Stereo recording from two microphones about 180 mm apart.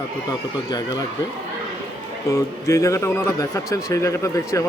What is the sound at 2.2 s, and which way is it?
Speech, 20° left (ahead or behind).